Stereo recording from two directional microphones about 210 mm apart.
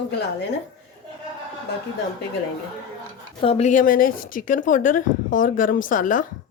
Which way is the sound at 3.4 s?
30° left (ahead or behind).